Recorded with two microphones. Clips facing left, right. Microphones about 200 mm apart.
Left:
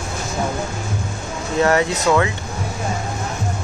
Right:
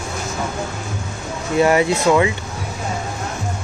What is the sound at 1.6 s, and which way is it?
Speech, 10° right (ahead or behind).